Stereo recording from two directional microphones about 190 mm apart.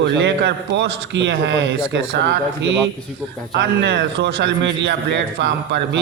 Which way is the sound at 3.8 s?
65° right (ahead or behind).